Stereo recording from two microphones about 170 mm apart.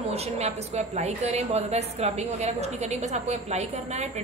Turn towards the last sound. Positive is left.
turn(degrees=-40)  # may be behind; listen again after turning